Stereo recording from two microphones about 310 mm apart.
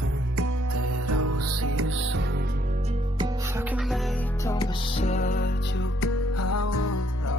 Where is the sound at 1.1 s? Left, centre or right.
Right.